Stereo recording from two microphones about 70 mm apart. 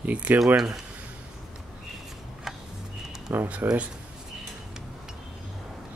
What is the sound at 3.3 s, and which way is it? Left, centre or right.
Speech, right.